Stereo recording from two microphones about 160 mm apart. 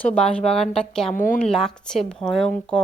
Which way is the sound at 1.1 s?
55° left (ahead or behind).